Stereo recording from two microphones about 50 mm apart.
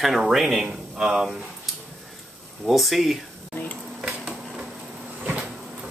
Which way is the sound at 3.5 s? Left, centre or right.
Left.